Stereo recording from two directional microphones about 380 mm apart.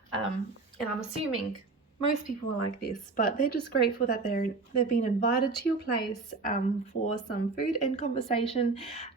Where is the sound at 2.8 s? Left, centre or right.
Left.